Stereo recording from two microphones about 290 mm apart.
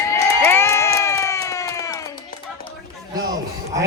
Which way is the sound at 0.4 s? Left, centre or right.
Centre.